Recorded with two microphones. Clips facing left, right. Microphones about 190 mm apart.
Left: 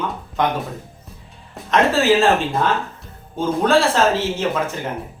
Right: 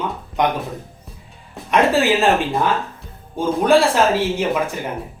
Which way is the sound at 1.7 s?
15° right (ahead or behind).